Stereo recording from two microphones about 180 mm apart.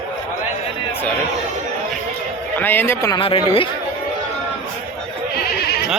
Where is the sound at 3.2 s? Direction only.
30° left (ahead or behind).